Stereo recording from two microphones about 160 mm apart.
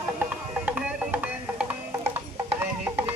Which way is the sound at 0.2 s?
5° right (ahead or behind).